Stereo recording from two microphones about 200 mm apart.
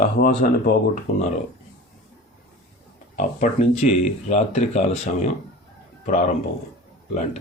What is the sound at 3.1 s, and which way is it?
Speech, 35° left (ahead or behind).